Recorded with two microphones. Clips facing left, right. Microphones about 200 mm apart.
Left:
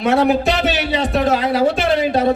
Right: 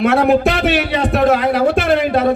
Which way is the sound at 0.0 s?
60° right (ahead or behind).